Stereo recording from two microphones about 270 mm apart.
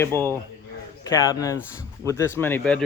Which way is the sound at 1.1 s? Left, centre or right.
Centre.